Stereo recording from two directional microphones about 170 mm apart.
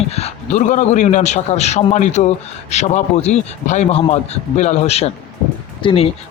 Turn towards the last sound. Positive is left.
turn(degrees=35)  # may be behind; listen again after turning